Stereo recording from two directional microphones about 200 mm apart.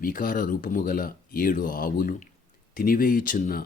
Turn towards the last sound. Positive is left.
turn(degrees=40)  # may be behind; listen again after turning